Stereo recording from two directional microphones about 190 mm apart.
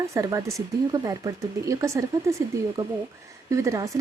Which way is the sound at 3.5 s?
15° right (ahead or behind).